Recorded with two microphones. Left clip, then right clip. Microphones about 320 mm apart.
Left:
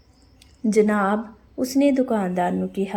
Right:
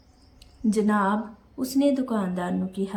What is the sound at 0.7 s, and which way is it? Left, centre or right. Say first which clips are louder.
Speech: left 4 dB; centre.